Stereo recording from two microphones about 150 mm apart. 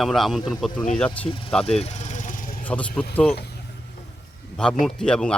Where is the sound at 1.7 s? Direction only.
50° left (ahead or behind); by 2.6 s 65° left (ahead or behind).